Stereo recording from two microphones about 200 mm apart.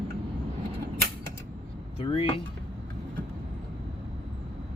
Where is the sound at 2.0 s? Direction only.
25° left (ahead or behind).